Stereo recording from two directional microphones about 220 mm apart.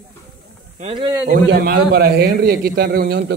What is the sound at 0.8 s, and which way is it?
Speech, 20° right (ahead or behind).